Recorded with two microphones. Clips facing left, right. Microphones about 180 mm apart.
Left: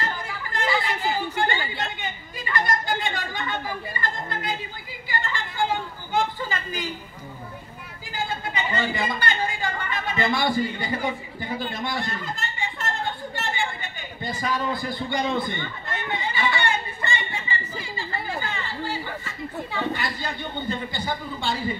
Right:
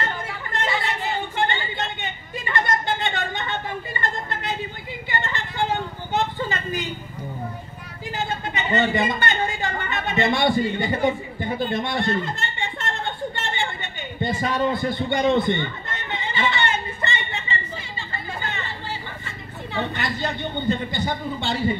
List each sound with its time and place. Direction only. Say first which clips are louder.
0.0 s chatter: right 2 dB; 25° right (ahead or behind)
4.0 s a sound: right 1 dB; 25° right (ahead or behind)
5.1 s vehicle: right 1 dB; 25° right (ahead or behind)
8.2 s speech: right 1 dB; 25° right (ahead or behind)
14.2 s speech: right 5 dB; 25° right (ahead or behind)
16.6 s a sound: right 1 dB; 25° right (ahead or behind)
18.4 s chatter: left 1 dB; 25° right (ahead or behind)
19.7 s a man's voice: right 3 dB; 20° right (ahead or behind)